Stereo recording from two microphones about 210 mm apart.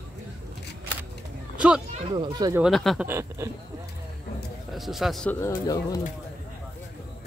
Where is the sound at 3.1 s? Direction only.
10° right (ahead or behind).